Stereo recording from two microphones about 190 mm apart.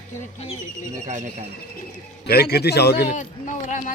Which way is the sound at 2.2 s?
55° left (ahead or behind).